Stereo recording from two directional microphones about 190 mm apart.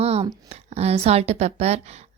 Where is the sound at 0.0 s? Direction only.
35° right (ahead or behind).